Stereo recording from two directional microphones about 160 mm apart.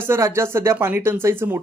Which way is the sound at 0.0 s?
15° right (ahead or behind).